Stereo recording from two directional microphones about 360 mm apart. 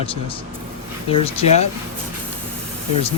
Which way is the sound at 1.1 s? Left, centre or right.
Centre.